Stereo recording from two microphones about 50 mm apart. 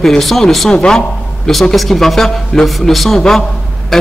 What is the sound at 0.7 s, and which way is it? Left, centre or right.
Speech, centre.